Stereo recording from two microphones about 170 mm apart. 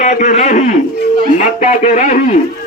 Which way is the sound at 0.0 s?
45° left (ahead or behind).